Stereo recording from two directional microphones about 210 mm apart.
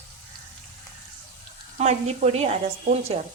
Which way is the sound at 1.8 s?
30° right (ahead or behind).